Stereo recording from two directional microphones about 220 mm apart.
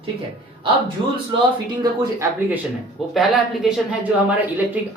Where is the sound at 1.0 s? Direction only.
25° right (ahead or behind).